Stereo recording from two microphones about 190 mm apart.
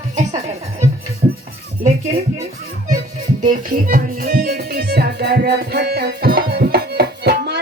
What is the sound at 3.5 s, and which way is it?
Music, 50° right (ahead or behind).